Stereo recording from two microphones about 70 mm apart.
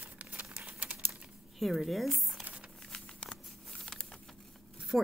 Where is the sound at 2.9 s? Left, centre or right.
Centre.